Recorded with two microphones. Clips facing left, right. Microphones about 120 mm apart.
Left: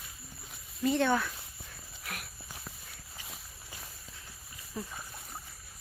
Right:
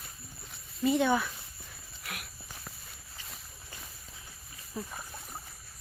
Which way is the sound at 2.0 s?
Centre (ahead or behind).